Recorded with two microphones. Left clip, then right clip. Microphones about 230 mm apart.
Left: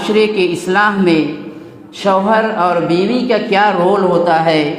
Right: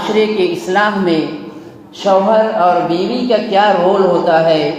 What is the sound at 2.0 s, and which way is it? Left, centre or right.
A woman's voice, left.